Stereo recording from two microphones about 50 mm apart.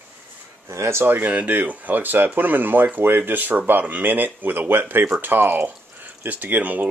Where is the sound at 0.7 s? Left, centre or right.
Right.